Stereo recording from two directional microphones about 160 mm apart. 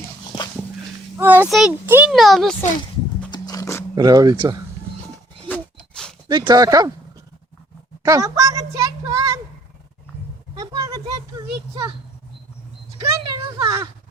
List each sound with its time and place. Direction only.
1.2 s a child's voice: 10° right (ahead or behind)
1.5 s speech: centre (ahead or behind)
1.9 s a child's voice: 10° right (ahead or behind)
2.1 s speech: centre (ahead or behind)
3.2 s wild animals: 25° left (ahead or behind)
3.9 s speech: 25° right (ahead or behind)
5.5 s a sound: 5° left (ahead or behind)
6.2 s speech: 25° right (ahead or behind)
8.0 s a sound: 20° right (ahead or behind)
10.5 s a sound: 20° right (ahead or behind)
13.2 s a child's voice: 20° right (ahead or behind)